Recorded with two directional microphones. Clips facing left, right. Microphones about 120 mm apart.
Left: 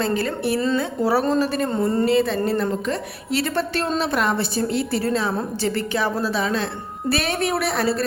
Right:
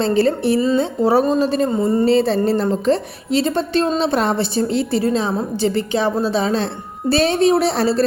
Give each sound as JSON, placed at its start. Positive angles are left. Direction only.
{"t": 0.0, "sound": "a woman's voice", "side_deg": -30}
{"t": 1.7, "sound": "speech", "side_deg": -5}
{"t": 2.0, "sound": "a woman's voice", "side_deg": -30}